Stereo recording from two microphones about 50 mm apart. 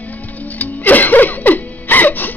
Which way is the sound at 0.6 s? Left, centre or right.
Left.